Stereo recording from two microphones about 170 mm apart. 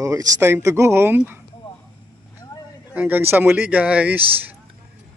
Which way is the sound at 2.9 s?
10° right (ahead or behind).